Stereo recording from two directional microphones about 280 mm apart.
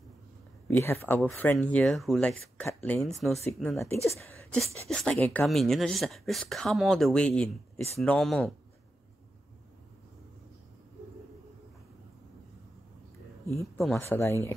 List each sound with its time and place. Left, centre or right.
0.7 s speech: centre
13.7 s speech: centre